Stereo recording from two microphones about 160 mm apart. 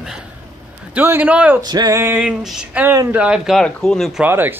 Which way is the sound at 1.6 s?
25° right (ahead or behind).